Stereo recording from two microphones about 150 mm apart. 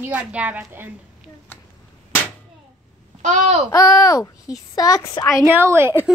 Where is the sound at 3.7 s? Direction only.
25° left (ahead or behind).